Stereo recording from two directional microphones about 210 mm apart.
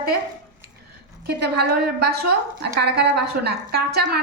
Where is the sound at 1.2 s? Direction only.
50° right (ahead or behind).